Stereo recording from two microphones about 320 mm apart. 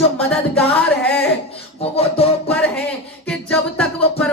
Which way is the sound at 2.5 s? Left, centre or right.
Centre.